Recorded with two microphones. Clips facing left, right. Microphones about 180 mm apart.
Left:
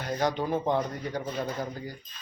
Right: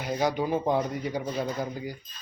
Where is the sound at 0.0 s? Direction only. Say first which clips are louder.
Right 1 dB; 10° right (ahead or behind).